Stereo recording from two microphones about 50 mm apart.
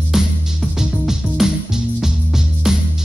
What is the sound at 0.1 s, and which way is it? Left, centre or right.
Music, centre.